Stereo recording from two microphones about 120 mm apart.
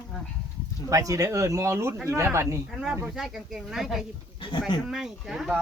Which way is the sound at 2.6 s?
5° right (ahead or behind).